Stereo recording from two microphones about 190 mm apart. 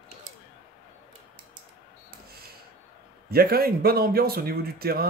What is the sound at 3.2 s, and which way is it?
Speech, 50° right (ahead or behind).